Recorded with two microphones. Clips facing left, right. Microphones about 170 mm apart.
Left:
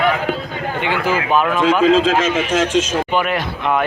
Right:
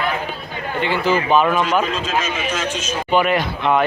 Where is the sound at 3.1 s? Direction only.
Centre (ahead or behind).